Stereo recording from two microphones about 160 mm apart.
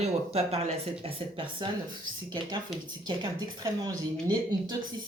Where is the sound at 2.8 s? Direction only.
25° right (ahead or behind).